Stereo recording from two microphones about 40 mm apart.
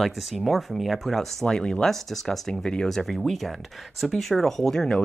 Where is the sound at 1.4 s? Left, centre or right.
Centre.